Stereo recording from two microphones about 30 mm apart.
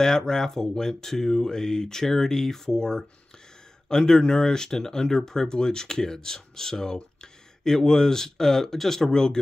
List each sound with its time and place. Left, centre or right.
0.0 s speech: centre
9.1 s speech: left